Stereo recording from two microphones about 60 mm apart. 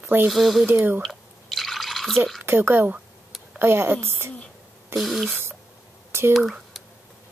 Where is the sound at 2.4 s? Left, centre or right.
Right.